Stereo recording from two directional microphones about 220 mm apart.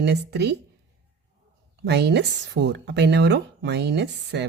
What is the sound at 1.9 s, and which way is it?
A woman's voice, 50° right (ahead or behind).